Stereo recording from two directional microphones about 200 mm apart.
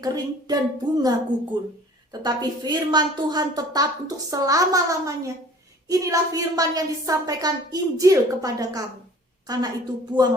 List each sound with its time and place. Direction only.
0.0 s a woman's voice: 20° right (ahead or behind)
2.2 s a woman's voice: 20° right (ahead or behind)